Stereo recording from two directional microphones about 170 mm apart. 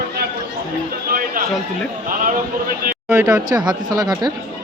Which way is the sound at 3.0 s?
15° right (ahead or behind).